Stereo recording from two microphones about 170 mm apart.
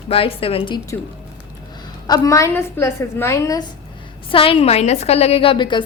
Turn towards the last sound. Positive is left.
turn(degrees=30)  # may be behind; listen again after turning